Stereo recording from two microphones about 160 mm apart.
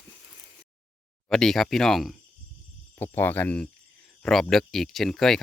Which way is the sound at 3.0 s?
15° left (ahead or behind).